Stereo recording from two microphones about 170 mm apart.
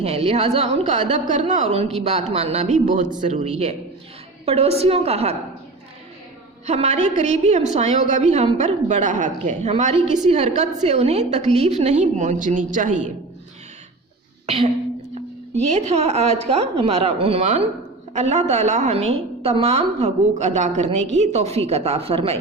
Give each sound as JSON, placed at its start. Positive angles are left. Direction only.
{"t": 0.0, "sound": "a woman's voice", "side_deg": -35}
{"t": 6.7, "sound": "a woman's voice", "side_deg": -40}
{"t": 14.4, "sound": "a woman's voice", "side_deg": -35}